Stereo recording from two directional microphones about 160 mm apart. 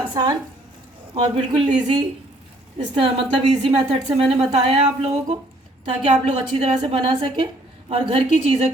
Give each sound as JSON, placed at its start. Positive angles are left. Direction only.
{"t": 0.1, "sound": "a woman's voice", "side_deg": -30}
{"t": 2.7, "sound": "a woman's voice", "side_deg": -30}